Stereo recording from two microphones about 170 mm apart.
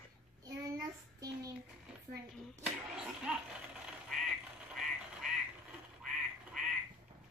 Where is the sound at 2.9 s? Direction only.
5° right (ahead or behind).